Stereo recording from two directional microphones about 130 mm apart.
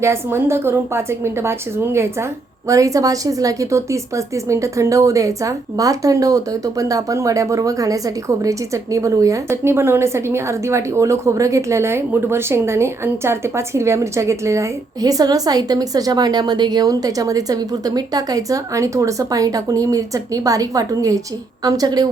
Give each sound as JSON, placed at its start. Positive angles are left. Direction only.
{"t": 0.0, "sound": "a woman's voice", "side_deg": -20}